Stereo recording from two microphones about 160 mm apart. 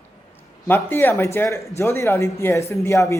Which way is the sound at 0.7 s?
15° left (ahead or behind).